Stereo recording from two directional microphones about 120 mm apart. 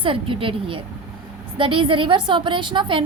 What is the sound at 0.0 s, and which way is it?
A woman's voice, 50° right (ahead or behind).